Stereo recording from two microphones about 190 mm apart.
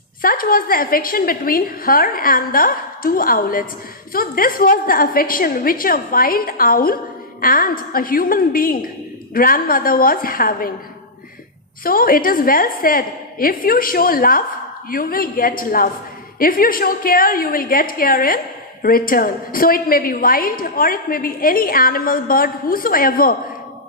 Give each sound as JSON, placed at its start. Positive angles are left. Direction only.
{"t": 0.2, "sound": "a woman's voice", "side_deg": 50}
{"t": 11.8, "sound": "a woman's voice", "side_deg": 50}